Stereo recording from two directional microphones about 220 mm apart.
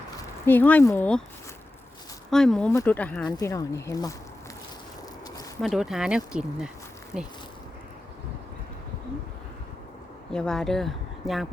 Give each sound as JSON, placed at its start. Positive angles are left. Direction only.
{"t": 0.4, "sound": "speech", "side_deg": 10}
{"t": 2.3, "sound": "speech", "side_deg": 0}
{"t": 3.2, "sound": "speech", "side_deg": 15}
{"t": 5.6, "sound": "speech", "side_deg": 0}
{"t": 10.3, "sound": "speech", "side_deg": 5}